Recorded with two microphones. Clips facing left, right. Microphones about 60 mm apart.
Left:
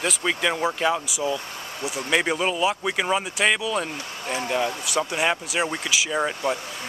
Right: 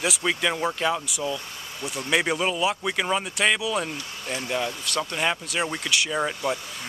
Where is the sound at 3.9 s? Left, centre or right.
Left.